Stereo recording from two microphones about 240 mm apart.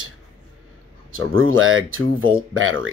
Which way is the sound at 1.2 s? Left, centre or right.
Right.